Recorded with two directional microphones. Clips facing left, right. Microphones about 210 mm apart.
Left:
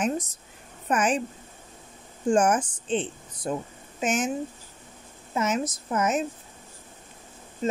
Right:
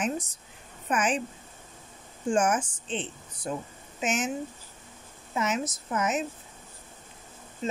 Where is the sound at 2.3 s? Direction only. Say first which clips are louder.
Left 4 dB; 40° left (ahead or behind).